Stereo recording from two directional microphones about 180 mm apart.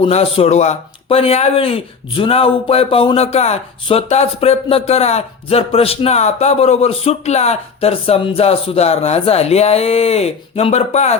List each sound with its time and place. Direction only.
0.0 s speech: 35° left (ahead or behind)